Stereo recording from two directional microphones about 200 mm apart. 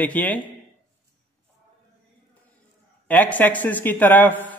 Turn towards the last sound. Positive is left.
turn(degrees=10)  # may be behind; listen again after turning